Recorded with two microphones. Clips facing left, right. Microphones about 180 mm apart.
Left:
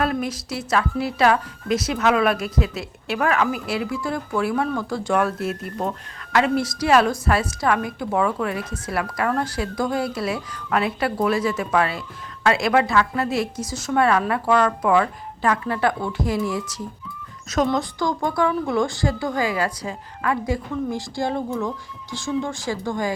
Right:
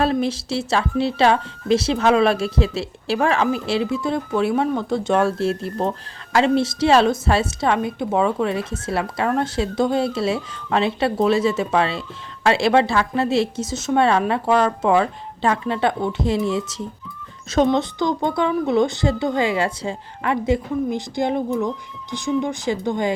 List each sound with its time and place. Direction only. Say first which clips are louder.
0.0 s a woman's voice: right 4 dB; 30° right (ahead or behind)